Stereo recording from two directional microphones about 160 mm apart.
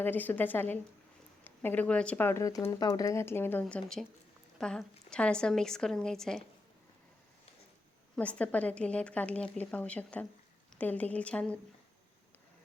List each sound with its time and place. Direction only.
0.0 s a woman's voice: 10° left (ahead or behind)
8.1 s speech: 10° left (ahead or behind)